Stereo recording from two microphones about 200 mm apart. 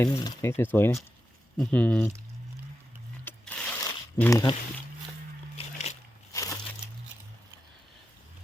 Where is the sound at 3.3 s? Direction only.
5° left (ahead or behind).